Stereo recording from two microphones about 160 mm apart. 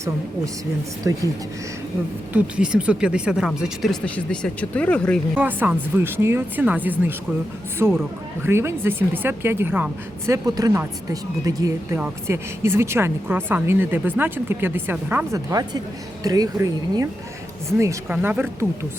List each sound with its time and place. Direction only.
1.0 s speech: 20° right (ahead or behind)
2.3 s speech: 5° right (ahead or behind)
5.3 s a woman's voice: 10° right (ahead or behind)